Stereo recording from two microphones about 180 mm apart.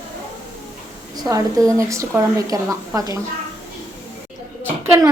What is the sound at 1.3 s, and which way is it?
A woman's voice, 20° right (ahead or behind).